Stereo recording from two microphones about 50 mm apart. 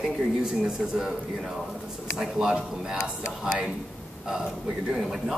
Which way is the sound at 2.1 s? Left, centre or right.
Centre.